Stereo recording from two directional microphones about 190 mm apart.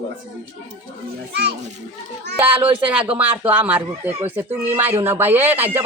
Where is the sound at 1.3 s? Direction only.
65° right (ahead or behind).